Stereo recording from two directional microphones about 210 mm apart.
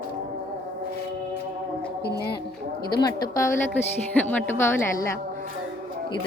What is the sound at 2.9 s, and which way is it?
Speech, 20° left (ahead or behind).